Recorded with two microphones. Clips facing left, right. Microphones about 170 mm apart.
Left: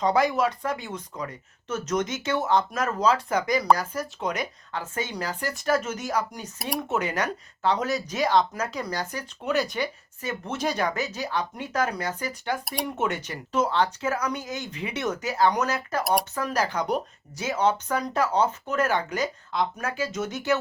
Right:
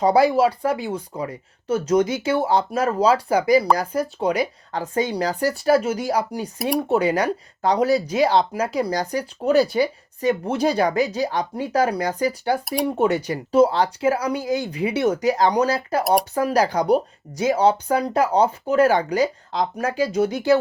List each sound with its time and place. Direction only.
0.0 s speech: 35° right (ahead or behind)
12.6 s speech: centre (ahead or behind)
13.0 s speech: 35° right (ahead or behind)